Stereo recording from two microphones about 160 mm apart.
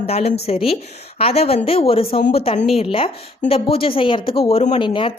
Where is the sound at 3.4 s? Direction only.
35° left (ahead or behind).